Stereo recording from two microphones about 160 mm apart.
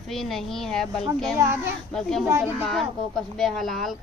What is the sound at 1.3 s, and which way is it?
Speech, 15° right (ahead or behind).